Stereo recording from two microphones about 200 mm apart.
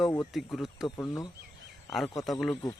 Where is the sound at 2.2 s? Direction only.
Centre (ahead or behind).